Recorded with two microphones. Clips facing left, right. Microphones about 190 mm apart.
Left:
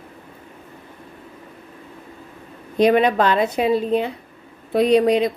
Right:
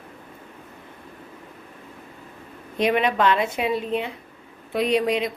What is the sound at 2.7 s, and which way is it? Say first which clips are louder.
A woman's voice: left 6 dB; 35° left (ahead or behind).